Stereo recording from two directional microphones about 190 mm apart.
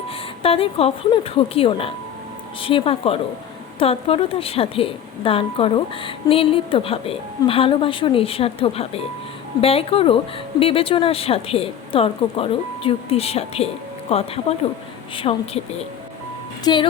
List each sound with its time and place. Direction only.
0.4 s a woman's voice: 30° left (ahead or behind)
16.7 s a woman's voice: 20° left (ahead or behind)